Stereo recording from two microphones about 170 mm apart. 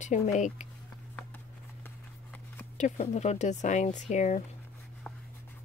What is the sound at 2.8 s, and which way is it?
Speech, 45° left (ahead or behind).